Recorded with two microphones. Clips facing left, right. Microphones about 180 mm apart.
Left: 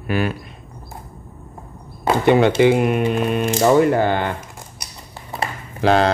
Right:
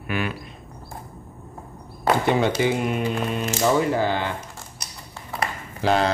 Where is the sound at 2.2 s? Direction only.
65° left (ahead or behind).